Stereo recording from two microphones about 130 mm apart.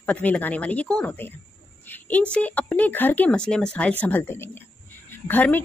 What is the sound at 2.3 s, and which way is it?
A woman's voice, 10° left (ahead or behind).